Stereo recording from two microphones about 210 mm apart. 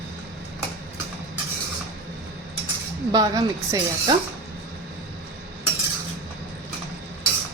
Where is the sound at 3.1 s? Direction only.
20° right (ahead or behind).